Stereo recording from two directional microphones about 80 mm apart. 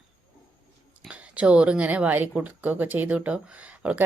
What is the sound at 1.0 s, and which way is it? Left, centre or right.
Speech, centre.